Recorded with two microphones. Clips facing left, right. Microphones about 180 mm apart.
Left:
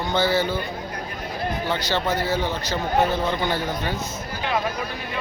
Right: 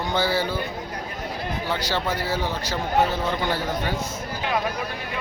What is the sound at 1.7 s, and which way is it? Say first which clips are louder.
Speech: left 1 dB; 10° right (ahead or behind).